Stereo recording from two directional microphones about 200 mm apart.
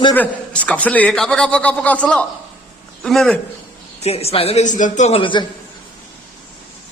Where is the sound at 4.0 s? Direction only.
30° left (ahead or behind).